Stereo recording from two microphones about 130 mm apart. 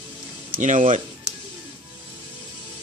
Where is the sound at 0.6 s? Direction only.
75° right (ahead or behind).